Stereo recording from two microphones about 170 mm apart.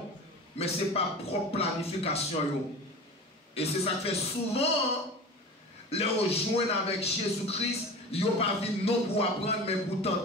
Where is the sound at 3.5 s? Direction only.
35° left (ahead or behind).